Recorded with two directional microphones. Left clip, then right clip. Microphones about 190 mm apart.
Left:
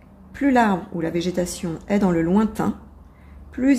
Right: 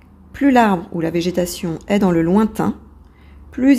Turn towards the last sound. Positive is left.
turn(degrees=-30)  # may be behind; listen again after turning